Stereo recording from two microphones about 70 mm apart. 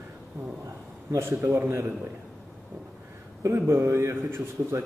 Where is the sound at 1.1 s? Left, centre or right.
Right.